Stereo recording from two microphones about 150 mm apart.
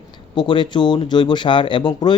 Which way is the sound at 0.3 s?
30° left (ahead or behind).